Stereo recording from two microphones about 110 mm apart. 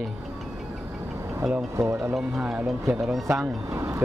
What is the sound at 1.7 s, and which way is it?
Speech, 25° right (ahead or behind).